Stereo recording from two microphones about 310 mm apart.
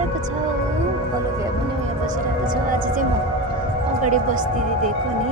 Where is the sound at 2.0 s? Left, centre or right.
Right.